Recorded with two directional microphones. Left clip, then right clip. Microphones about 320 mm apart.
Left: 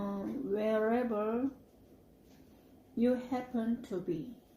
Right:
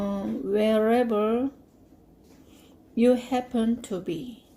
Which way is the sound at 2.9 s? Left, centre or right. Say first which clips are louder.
Right 10 dB; right.